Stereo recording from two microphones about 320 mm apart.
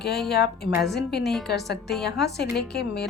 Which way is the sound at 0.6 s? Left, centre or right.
Centre.